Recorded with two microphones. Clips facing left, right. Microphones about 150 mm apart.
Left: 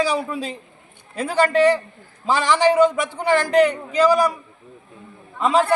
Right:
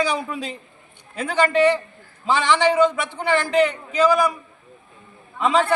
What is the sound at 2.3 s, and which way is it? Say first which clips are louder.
A man's voice: left 1 dB; 40° left (ahead or behind).